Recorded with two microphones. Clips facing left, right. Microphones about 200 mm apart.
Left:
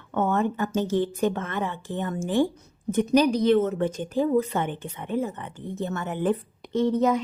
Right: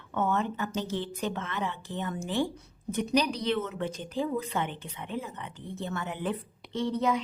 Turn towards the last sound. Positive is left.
turn(degrees=45)  # may be behind; listen again after turning